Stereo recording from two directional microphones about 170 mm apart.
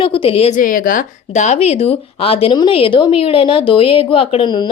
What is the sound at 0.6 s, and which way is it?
Speech, 55° left (ahead or behind).